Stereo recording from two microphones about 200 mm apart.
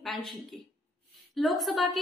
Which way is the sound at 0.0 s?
Centre (ahead or behind).